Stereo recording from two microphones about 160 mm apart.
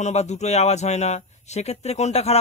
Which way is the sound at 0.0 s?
45° left (ahead or behind).